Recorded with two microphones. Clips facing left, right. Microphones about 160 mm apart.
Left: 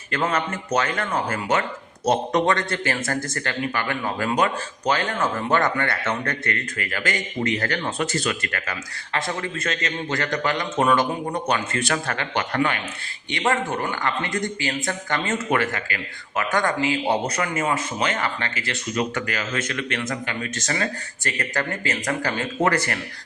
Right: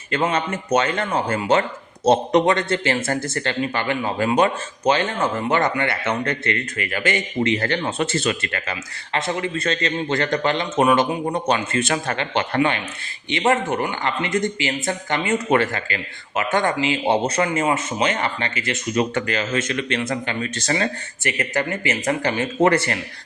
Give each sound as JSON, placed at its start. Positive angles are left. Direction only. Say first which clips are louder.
{"t": 0.1, "sound": "speech", "louder": "right 3 dB", "side_deg": -25}
{"t": 15.5, "sound": "speech", "louder": "right 4 dB", "side_deg": -30}
{"t": 21.2, "sound": "speech", "louder": "right 3 dB", "side_deg": -20}